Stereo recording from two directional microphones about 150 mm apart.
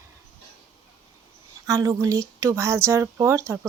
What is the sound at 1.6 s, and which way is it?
Speech, 20° right (ahead or behind).